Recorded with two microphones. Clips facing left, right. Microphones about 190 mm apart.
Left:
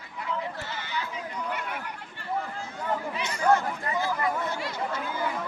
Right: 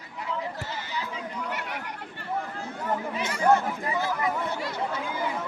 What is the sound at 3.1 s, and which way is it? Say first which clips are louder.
Chatter: right 2 dB; 55° right (ahead or behind).